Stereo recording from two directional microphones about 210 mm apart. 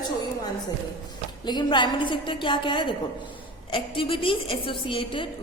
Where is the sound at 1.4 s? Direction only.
20° left (ahead or behind).